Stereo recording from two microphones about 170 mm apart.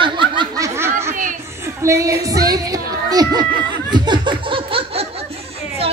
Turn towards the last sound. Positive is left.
turn(degrees=-30)  # may be behind; listen again after turning